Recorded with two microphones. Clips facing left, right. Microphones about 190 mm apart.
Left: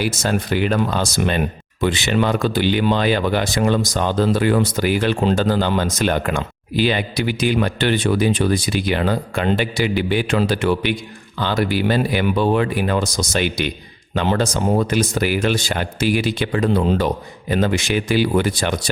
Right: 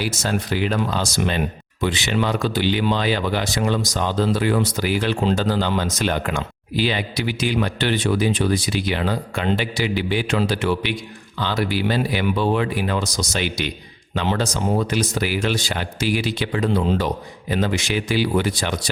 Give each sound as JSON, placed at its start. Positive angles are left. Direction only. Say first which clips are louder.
{"t": 0.0, "sound": "speech", "louder": "left 3 dB", "side_deg": 55}